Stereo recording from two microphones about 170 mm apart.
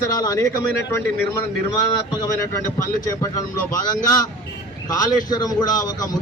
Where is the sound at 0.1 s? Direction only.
20° left (ahead or behind).